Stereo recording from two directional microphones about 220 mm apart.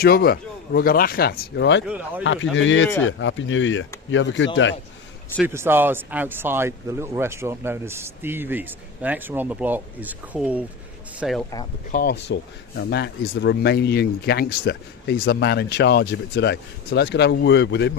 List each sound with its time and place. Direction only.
0.0 s speech: 45° left (ahead or behind)
1.9 s speech: 5° right (ahead or behind)
2.2 s speech: 55° left (ahead or behind)
5.4 s speech: 10° right (ahead or behind)
11.9 s speech: 40° left (ahead or behind)